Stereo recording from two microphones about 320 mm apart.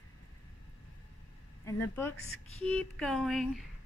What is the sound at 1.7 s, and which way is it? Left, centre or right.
Speech, centre.